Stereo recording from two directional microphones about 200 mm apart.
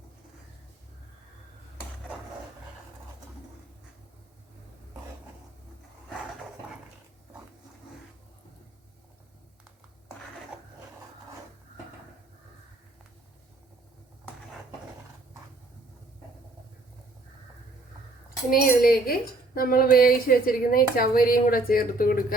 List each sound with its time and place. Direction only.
18.5 s speech: 45° left (ahead or behind)